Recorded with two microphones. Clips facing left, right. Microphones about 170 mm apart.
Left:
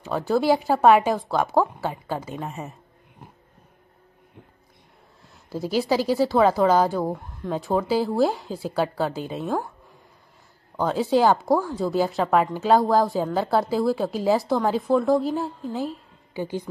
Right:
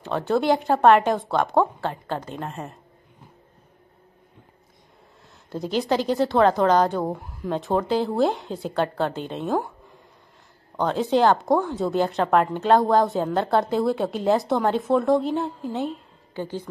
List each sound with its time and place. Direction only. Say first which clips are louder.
0.0 s speech: even; centre (ahead or behind)
5.5 s speech: left 1 dB; 5° left (ahead or behind)
10.8 s speech: even; centre (ahead or behind)
16.3 s a woman's voice: left 2 dB; 10° left (ahead or behind)